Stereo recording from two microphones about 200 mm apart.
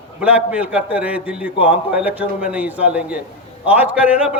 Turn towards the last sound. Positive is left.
turn(degrees=-5)  # may be behind; listen again after turning